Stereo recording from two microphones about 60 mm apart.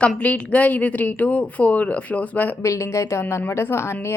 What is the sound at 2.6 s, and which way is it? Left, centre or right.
Speech, left.